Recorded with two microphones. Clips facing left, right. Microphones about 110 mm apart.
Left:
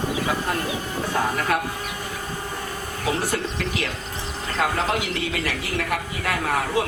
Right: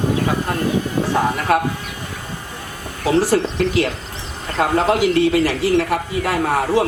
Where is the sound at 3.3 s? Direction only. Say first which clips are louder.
Right 9 dB; 35° right (ahead or behind).